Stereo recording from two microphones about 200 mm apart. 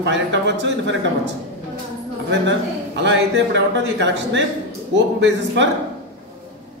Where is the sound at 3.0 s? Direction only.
60° right (ahead or behind).